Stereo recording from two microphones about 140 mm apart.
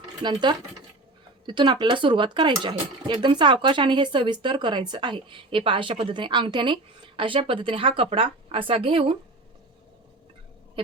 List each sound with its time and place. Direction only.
0.2 s speech: 30° right (ahead or behind)